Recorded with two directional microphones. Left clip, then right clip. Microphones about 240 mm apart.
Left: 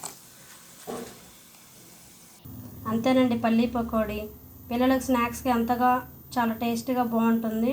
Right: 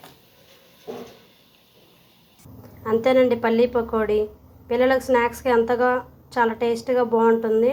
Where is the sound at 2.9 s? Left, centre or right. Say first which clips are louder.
Right 7 dB; centre.